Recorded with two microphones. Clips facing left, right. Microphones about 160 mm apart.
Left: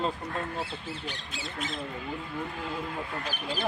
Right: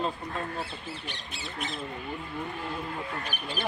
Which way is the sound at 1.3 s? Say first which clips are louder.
Right 1 dB; 90° left.